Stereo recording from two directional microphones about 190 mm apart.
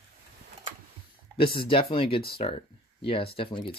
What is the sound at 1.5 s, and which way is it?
Speech, 25° left (ahead or behind).